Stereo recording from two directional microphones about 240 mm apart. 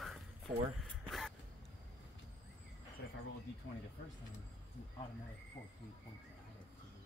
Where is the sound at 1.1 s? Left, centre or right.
Centre.